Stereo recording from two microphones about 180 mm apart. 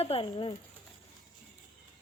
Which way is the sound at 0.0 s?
30° left (ahead or behind).